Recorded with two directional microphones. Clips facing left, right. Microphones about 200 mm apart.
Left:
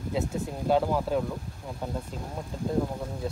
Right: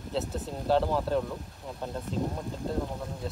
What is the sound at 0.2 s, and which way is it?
Speech, centre (ahead or behind).